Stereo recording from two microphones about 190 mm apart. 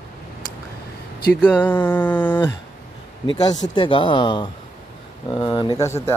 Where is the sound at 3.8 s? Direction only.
25° left (ahead or behind).